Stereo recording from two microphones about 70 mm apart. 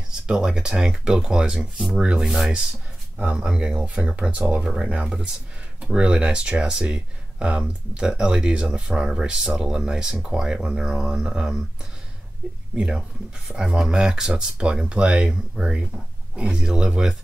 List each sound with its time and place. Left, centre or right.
0.3 s speech: centre
1.6 s speech: centre
12.7 s speech: centre